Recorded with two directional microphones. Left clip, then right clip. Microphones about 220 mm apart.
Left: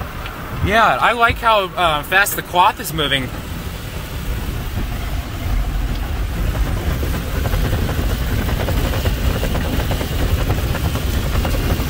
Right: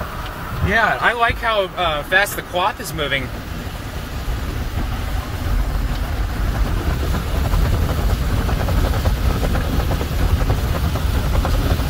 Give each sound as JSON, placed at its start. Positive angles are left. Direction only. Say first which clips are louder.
{"t": 0.7, "sound": "speech", "louder": "left 3 dB", "side_deg": 30}